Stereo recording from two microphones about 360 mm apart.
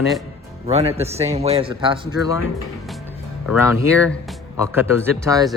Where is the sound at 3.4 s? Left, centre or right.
Centre.